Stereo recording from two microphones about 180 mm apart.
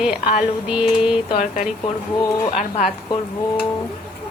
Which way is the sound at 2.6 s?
40° left (ahead or behind).